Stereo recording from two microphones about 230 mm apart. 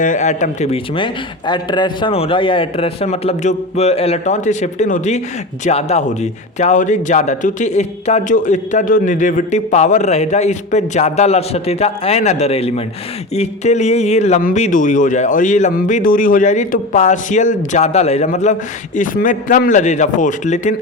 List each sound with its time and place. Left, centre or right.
0.0 s a man's voice: left